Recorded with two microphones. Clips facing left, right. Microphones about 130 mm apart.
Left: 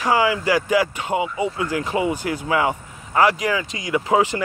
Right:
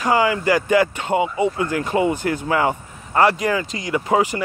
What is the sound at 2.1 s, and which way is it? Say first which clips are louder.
Speech: right 1 dB; 50° right (ahead or behind).